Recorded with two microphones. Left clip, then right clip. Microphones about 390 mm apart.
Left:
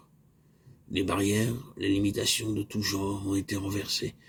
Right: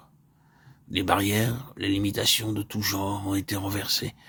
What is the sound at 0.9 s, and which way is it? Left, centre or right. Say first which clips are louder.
Speech: right 4 dB; right.